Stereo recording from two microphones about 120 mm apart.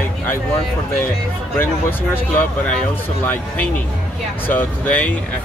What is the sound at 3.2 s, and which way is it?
Speech, 15° left (ahead or behind).